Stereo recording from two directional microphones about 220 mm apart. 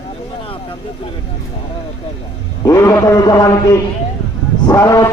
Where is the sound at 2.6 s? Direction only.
15° left (ahead or behind).